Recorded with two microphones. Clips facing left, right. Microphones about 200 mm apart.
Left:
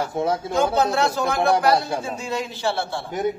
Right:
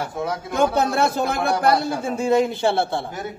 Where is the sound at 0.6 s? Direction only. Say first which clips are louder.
Right 2 dB; 55° right (ahead or behind).